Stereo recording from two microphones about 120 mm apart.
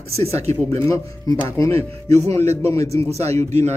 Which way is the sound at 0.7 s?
25° left (ahead or behind).